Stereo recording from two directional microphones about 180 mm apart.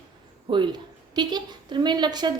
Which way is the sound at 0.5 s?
25° right (ahead or behind).